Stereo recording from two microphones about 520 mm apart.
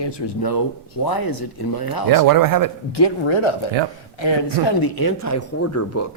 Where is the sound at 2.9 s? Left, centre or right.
Left.